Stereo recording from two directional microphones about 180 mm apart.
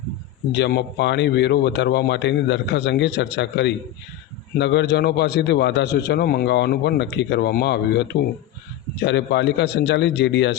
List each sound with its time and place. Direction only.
0.5 s a man's voice: 70° left (ahead or behind)